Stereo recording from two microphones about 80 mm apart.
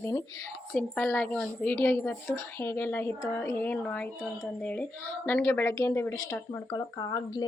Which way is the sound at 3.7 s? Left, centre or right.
Centre.